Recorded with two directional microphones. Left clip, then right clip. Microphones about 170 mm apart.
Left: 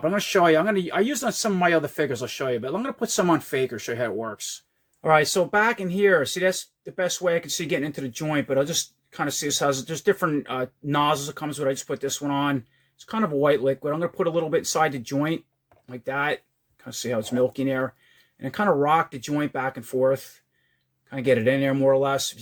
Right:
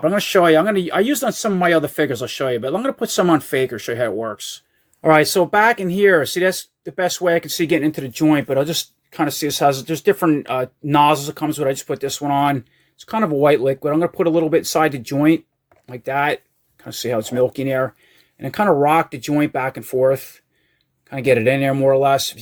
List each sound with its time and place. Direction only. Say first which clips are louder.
0.0 s speech: right 5 dB; 25° right (ahead or behind)
5.0 s speech: right 6 dB; 35° right (ahead or behind)